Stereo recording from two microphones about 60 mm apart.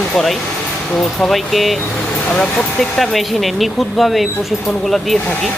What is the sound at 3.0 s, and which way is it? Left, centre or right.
Speech, centre.